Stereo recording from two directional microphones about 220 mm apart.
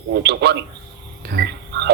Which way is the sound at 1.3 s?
50° right (ahead or behind).